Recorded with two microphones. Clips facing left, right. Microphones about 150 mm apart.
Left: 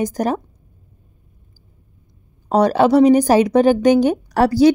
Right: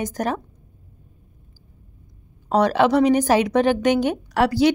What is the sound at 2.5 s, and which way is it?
A woman's voice, 40° left (ahead or behind).